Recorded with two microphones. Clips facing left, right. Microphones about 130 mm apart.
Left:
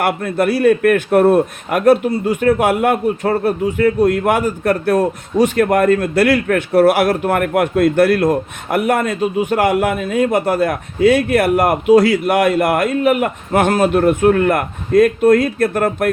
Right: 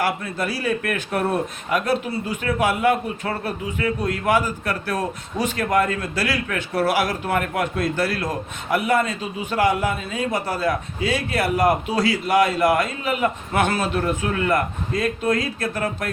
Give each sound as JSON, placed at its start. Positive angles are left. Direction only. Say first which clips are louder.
{"t": 0.0, "sound": "a man's voice", "louder": "left 7 dB", "side_deg": 60}